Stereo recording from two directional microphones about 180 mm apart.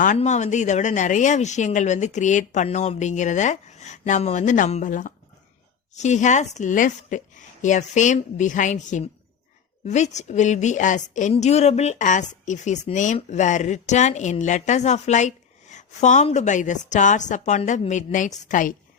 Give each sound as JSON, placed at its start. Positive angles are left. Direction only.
{"t": 0.0, "sound": "a woman's voice", "side_deg": 45}